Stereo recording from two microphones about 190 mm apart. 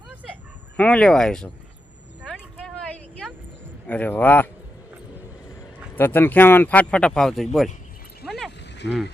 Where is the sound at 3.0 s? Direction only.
5° left (ahead or behind).